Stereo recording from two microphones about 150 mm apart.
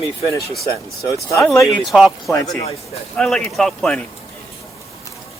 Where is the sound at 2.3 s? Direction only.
20° left (ahead or behind).